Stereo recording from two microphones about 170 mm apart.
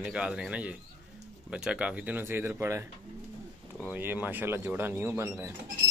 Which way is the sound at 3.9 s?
10° right (ahead or behind).